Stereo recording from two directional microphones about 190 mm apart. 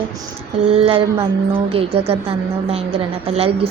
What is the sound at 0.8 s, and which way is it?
A woman's voice, 30° right (ahead or behind).